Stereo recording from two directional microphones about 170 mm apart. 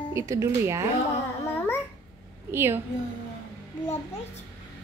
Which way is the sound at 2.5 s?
15° right (ahead or behind).